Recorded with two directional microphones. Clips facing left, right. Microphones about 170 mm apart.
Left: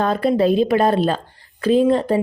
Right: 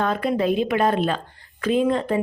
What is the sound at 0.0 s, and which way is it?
Speech, 35° left (ahead or behind).